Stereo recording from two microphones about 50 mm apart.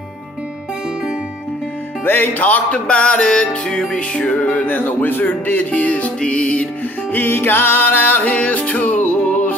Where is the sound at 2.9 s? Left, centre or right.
Left.